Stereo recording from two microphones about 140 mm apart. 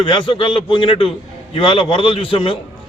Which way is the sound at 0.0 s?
35° left (ahead or behind).